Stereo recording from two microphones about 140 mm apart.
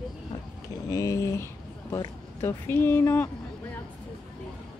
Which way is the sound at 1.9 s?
20° left (ahead or behind).